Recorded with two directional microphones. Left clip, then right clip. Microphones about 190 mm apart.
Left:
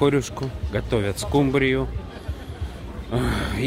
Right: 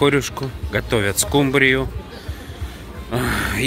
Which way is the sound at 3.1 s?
5° left (ahead or behind).